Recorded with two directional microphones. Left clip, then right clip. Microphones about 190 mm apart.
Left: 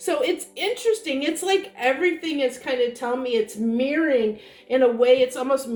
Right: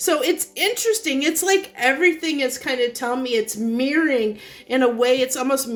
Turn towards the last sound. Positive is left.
turn(degrees=-55)  # may be behind; listen again after turning